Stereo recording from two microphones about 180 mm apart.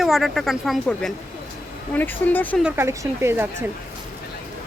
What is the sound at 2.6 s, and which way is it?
Speech, 15° right (ahead or behind).